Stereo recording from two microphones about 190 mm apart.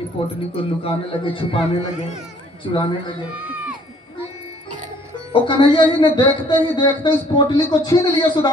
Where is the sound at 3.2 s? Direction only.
10° right (ahead or behind).